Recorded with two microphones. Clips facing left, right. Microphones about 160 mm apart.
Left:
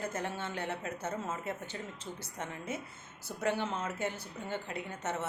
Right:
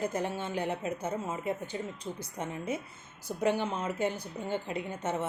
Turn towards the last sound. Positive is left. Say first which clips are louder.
# right 4 dB
turn(degrees=-15)  # may be behind; listen again after turning